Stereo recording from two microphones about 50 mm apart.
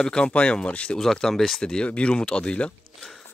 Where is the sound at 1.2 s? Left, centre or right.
Centre.